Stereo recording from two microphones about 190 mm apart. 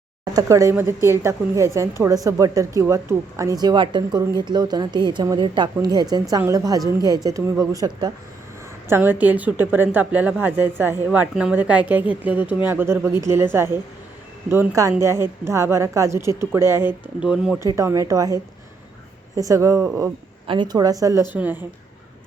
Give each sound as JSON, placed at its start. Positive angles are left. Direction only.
{"t": 0.3, "sound": "a woman's voice", "side_deg": -15}
{"t": 17.6, "sound": "a woman's voice", "side_deg": -15}
{"t": 19.4, "sound": "a woman's voice", "side_deg": -15}